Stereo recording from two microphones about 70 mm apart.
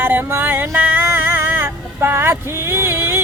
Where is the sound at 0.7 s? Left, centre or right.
Right.